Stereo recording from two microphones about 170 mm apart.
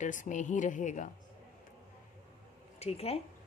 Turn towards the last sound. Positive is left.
turn(degrees=35)  # may be behind; listen again after turning